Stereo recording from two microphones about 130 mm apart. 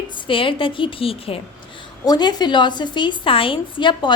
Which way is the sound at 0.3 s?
40° left (ahead or behind).